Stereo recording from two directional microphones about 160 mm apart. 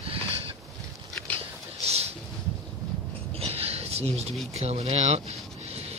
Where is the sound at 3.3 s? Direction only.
40° right (ahead or behind).